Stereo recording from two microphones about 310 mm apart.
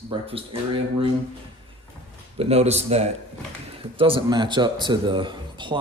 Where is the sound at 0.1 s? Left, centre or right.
Centre.